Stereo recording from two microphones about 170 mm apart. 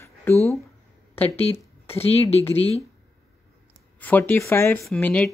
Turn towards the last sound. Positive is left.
turn(degrees=10)  # may be behind; listen again after turning